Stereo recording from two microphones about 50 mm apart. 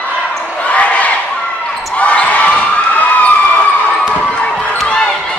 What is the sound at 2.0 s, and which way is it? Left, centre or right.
Basketball bounce, left.